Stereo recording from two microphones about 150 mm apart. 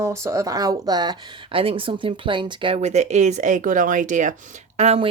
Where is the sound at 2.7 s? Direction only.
50° right (ahead or behind).